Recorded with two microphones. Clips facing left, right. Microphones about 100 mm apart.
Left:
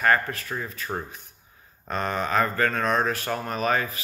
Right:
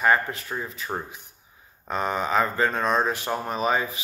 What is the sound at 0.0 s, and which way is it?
Speech, 15° right (ahead or behind).